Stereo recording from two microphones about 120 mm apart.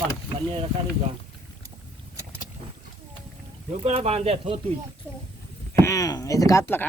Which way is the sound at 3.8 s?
60° right (ahead or behind).